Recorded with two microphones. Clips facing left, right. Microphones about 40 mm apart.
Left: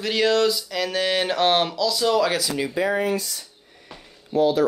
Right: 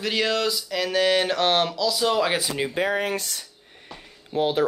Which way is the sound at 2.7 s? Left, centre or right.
Right.